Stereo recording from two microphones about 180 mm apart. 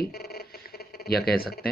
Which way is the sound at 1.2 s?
55° left (ahead or behind).